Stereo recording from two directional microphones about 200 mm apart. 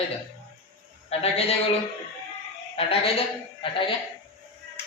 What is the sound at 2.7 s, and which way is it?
A woman's voice, 30° left (ahead or behind).